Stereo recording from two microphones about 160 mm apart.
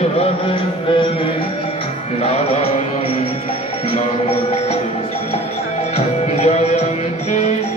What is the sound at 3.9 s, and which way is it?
Music, 40° left (ahead or behind).